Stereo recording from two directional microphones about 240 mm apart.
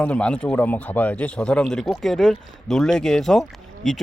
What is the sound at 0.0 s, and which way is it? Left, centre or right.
A man's voice, centre.